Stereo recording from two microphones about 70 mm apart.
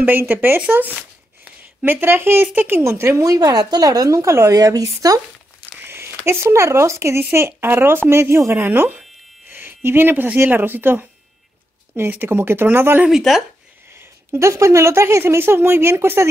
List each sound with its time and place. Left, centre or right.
0.3 s speech: right
0.9 s a sound: centre
1.9 s speech: right
2.8 s speech: right
3.3 s speech: right
4.2 s speech: right
5.8 s speech: right
8.6 s speech: right
13.3 s speech: centre
14.3 s speech: right